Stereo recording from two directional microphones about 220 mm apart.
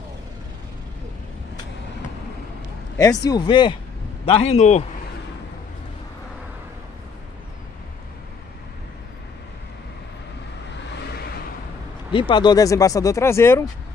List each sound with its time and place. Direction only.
3.3 s a man's voice: 20° left (ahead or behind)
12.1 s speech: 20° left (ahead or behind)